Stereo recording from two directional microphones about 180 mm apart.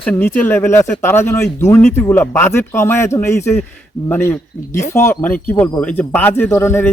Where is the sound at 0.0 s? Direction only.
10° left (ahead or behind).